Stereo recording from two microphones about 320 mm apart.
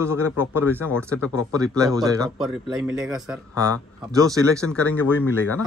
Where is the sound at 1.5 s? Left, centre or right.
Centre.